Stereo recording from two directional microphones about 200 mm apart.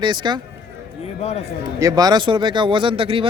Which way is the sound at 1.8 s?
20° right (ahead or behind).